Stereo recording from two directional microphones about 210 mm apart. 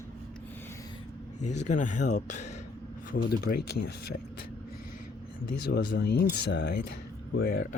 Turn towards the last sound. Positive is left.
turn(degrees=45)  # may be behind; listen again after turning